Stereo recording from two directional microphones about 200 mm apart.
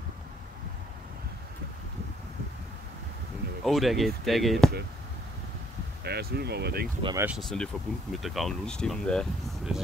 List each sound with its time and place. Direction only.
3.6 s speech: centre (ahead or behind)
6.0 s speech: 55° right (ahead or behind)
7.2 s speech: 5° right (ahead or behind)